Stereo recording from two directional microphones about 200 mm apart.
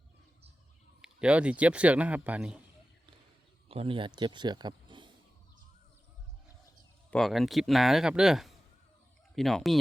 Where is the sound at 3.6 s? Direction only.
30° right (ahead or behind).